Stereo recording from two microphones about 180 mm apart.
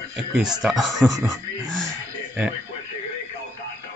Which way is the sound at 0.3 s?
5° right (ahead or behind).